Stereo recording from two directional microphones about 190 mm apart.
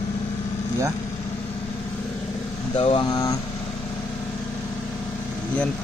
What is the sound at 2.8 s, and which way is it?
Speech, 25° left (ahead or behind).